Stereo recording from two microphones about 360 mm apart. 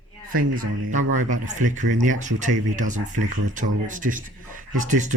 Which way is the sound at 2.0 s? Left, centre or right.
Right.